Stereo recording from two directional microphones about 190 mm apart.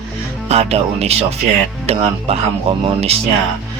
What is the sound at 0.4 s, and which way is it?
Speech, 35° right (ahead or behind).